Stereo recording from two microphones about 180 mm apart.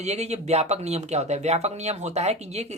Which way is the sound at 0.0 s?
40° right (ahead or behind).